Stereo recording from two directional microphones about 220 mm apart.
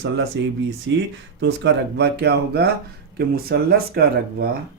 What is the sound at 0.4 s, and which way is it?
Speech, 55° right (ahead or behind).